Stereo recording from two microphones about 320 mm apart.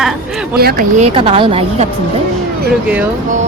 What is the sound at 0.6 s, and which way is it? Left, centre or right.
A woman's voice, right.